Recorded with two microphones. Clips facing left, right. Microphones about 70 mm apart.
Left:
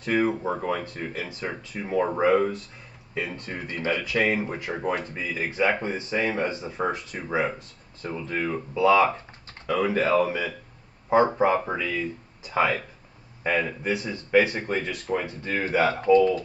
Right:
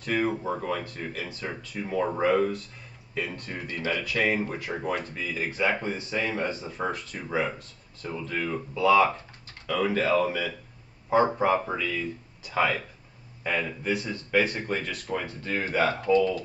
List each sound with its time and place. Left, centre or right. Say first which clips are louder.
0.0 s speech: left 3 dB; left